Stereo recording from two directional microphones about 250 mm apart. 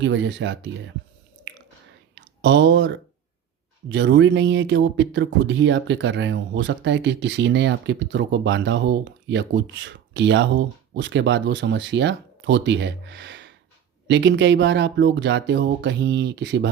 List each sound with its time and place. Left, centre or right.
0.0 s speech: right
2.1 s speech: right